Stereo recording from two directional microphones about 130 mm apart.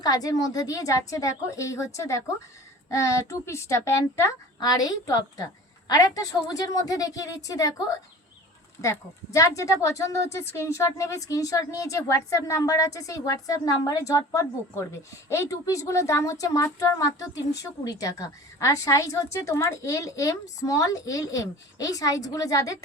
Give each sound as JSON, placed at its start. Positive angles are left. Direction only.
{"t": 0.0, "sound": "a woman's voice", "side_deg": 30}
{"t": 8.8, "sound": "a woman's voice", "side_deg": 25}